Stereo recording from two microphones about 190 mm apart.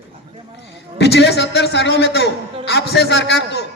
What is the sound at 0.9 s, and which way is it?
A man's voice, 60° left (ahead or behind).